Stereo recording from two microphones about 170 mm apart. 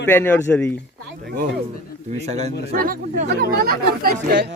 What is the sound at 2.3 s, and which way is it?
Speech, 40° right (ahead or behind).